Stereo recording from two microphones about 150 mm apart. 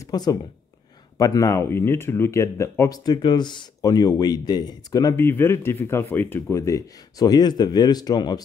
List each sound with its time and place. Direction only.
0.0 s speech: 25° left (ahead or behind)